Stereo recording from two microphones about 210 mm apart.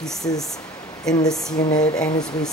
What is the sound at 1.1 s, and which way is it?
Speech, 15° left (ahead or behind).